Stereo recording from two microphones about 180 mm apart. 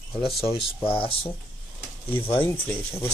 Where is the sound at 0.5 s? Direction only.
30° left (ahead or behind).